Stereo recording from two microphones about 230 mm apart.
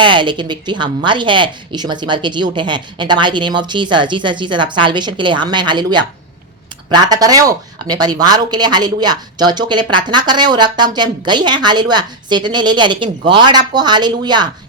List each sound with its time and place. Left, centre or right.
0.0 s speech: right